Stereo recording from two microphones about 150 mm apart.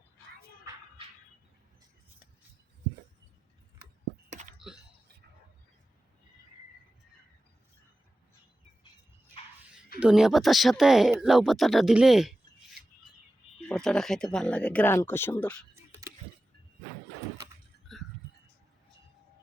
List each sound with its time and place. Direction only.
10.0 s speech: 5° right (ahead or behind)
12.8 s chirp: 90° right
13.7 s speech: 5° left (ahead or behind)
15.7 s a sound: 20° right (ahead or behind)